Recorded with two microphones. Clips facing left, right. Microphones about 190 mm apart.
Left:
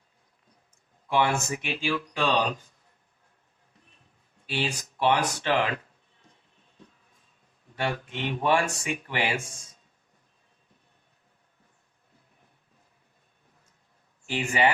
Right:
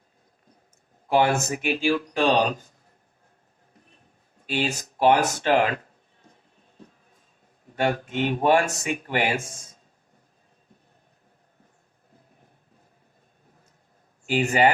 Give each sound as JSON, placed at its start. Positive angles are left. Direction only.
{"t": 1.0, "sound": "speech", "side_deg": -40}
{"t": 4.4, "sound": "speech", "side_deg": -45}
{"t": 7.8, "sound": "speech", "side_deg": -45}
{"t": 14.3, "sound": "speech", "side_deg": -40}